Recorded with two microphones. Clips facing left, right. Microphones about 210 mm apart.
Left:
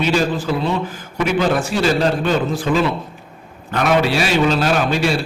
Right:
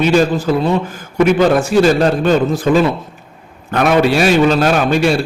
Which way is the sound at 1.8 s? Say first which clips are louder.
Right 5 dB; 45° right (ahead or behind).